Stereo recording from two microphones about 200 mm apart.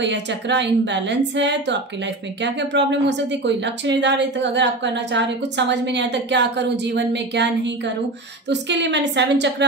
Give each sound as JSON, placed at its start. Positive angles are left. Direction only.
{"t": 0.0, "sound": "a woman's voice", "side_deg": -60}